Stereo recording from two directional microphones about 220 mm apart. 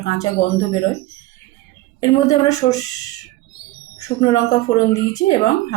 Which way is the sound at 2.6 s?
15° left (ahead or behind).